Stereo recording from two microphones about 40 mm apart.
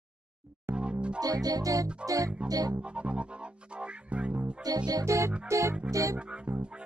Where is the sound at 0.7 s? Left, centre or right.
Right.